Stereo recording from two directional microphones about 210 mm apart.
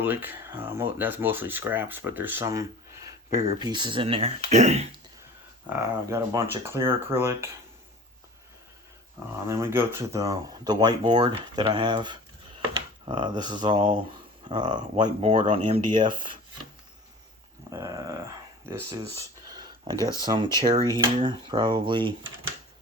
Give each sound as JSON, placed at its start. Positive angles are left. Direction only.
{"t": 0.0, "sound": "speech", "side_deg": -10}
{"t": 5.6, "sound": "speech", "side_deg": -15}
{"t": 9.5, "sound": "speech", "side_deg": -10}
{"t": 17.7, "sound": "a sound", "side_deg": -15}
{"t": 18.6, "sound": "speech", "side_deg": -10}